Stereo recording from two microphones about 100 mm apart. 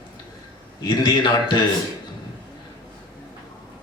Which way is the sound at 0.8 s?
45° left (ahead or behind).